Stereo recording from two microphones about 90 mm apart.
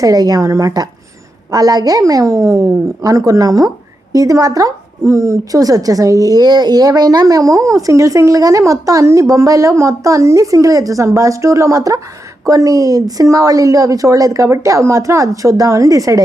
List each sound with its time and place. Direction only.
0.0 s a woman's voice: 45° right (ahead or behind)